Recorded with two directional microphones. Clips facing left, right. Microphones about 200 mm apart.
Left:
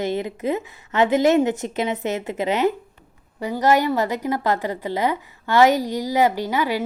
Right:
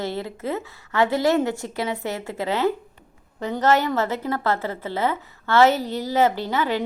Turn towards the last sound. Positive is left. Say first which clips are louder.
# left 1 dB
turn(degrees=10)  # may be behind; listen again after turning